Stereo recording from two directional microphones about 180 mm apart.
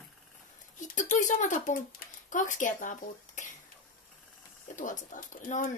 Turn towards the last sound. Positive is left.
turn(degrees=45)  # may be behind; listen again after turning